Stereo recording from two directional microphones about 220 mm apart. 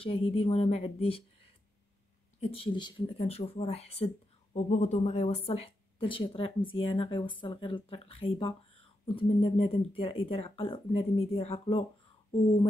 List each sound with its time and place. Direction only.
0.0 s speech: 25° left (ahead or behind)
2.4 s speech: 25° left (ahead or behind)